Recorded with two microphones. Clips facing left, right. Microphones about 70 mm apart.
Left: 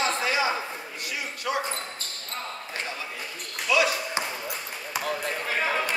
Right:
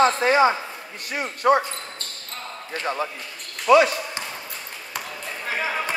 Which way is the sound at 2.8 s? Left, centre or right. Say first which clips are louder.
Right 12 dB; right.